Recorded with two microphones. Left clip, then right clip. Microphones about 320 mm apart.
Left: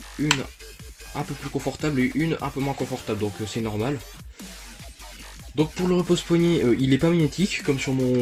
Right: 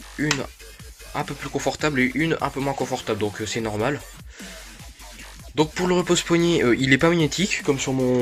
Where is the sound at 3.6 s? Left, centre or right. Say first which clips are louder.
Right 3 dB; right.